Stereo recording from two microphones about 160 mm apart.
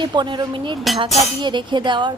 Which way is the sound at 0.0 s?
30° right (ahead or behind).